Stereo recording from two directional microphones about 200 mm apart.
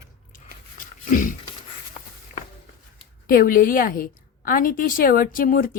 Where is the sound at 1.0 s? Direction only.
40° left (ahead or behind).